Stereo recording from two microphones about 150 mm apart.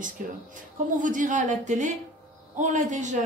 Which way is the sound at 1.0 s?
60° right (ahead or behind).